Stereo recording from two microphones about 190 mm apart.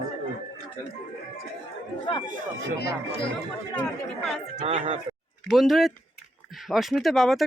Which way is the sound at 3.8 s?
Centre (ahead or behind).